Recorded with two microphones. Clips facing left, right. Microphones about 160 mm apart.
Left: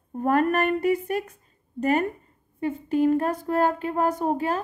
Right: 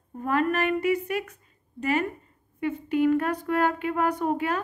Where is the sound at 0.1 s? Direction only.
45° left (ahead or behind).